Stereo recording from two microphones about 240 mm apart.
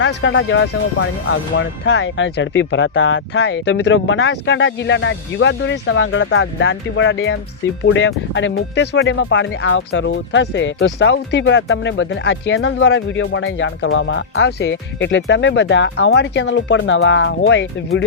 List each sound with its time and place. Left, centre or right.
0.0 s speech: left